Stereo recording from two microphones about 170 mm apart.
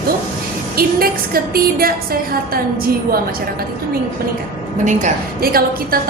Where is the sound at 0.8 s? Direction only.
60° right (ahead or behind).